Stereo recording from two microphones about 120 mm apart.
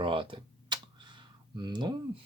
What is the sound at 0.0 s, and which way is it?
Computer keyboard, 45° right (ahead or behind).